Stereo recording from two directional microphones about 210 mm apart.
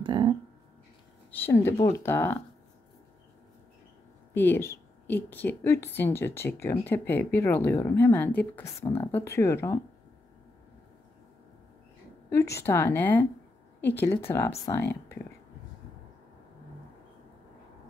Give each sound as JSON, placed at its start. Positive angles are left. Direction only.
{"t": 0.0, "sound": "a sound", "side_deg": -20}
{"t": 1.3, "sound": "a woman's voice", "side_deg": 10}
{"t": 4.3, "sound": "a woman's voice", "side_deg": 10}
{"t": 12.3, "sound": "a woman's voice", "side_deg": 15}